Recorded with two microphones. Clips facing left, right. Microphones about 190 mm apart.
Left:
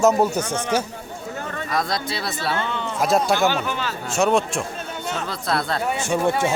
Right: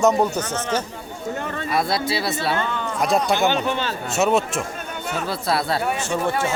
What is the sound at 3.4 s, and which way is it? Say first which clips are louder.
Speech: right 1 dB; 25° right (ahead or behind).